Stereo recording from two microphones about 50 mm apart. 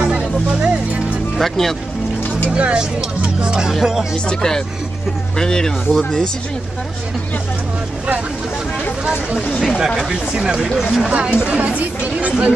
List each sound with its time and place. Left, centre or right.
0.0 s music: centre
1.4 s speech: centre
2.5 s speech: right
4.3 s speech: centre
9.8 s speech: centre
11.1 s speech: right